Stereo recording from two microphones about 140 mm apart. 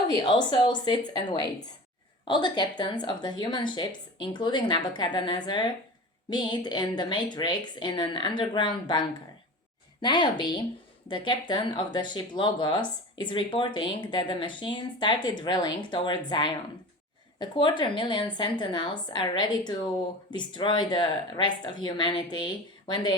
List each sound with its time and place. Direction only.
0.1 s a woman's voice: 30° left (ahead or behind)